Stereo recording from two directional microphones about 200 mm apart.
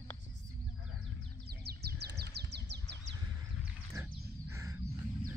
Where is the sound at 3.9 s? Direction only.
15° right (ahead or behind).